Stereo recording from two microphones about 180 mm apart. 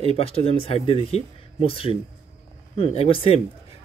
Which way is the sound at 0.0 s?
30° left (ahead or behind).